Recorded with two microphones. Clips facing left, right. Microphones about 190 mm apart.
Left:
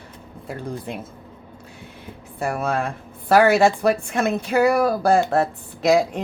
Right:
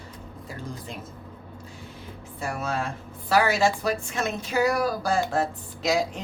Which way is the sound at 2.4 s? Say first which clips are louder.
Left 6 dB; 55° left (ahead or behind).